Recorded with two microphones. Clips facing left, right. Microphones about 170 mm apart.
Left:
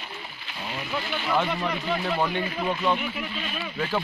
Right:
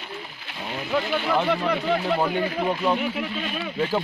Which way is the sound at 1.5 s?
70° right (ahead or behind).